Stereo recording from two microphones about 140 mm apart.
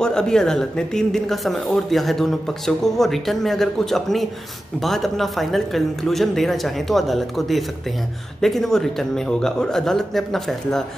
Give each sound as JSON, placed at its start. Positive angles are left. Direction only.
{"t": 0.0, "sound": "speech", "side_deg": 5}